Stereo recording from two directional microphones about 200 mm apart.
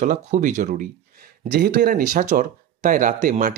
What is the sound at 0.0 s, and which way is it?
Speech, 40° right (ahead or behind).